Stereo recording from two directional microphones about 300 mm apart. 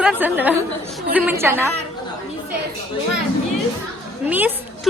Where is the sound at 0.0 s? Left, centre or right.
Centre.